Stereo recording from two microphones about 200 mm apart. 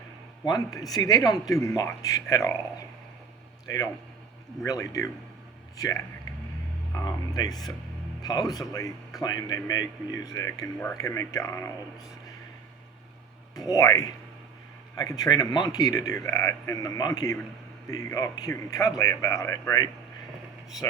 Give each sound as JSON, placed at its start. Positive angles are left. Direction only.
{"t": 0.4, "sound": "speech", "side_deg": 20}
{"t": 4.6, "sound": "a man's voice", "side_deg": 15}
{"t": 13.7, "sound": "a man's voice", "side_deg": 15}